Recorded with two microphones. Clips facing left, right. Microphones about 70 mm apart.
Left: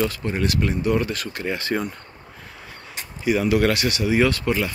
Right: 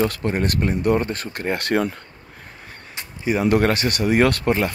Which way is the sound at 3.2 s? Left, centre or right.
Right.